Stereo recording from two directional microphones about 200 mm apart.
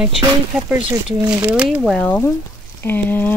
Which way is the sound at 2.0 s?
10° left (ahead or behind).